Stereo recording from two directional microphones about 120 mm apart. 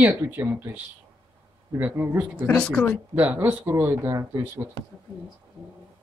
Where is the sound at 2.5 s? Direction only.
15° left (ahead or behind).